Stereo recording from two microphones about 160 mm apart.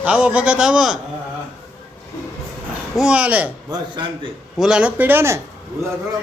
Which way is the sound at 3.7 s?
30° right (ahead or behind).